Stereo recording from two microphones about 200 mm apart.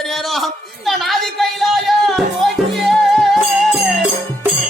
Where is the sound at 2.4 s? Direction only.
Centre (ahead or behind).